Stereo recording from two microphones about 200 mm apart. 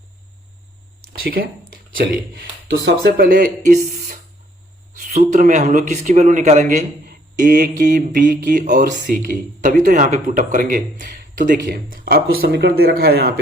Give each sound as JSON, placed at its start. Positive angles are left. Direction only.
{"t": 1.2, "sound": "a sound", "side_deg": -50}
{"t": 2.6, "sound": "speech", "side_deg": -55}
{"t": 4.9, "sound": "speech", "side_deg": -40}